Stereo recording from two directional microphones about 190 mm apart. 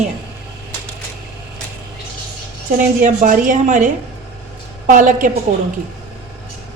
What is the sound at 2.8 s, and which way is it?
A woman's voice, 40° right (ahead or behind).